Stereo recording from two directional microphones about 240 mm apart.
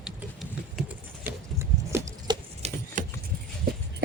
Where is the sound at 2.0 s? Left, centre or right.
Centre.